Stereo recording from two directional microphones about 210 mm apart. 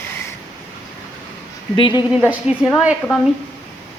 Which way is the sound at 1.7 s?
25° left (ahead or behind).